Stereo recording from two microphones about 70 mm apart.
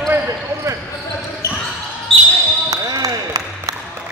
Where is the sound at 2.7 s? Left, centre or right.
Right.